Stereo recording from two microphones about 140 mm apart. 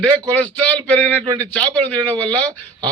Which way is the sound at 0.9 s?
10° left (ahead or behind).